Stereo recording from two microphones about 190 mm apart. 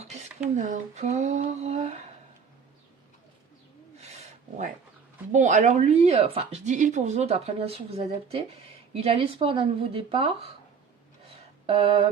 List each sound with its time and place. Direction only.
0.5 s speech: 40° right (ahead or behind)
5.3 s speech: 40° right (ahead or behind)
11.6 s a sound: 30° right (ahead or behind)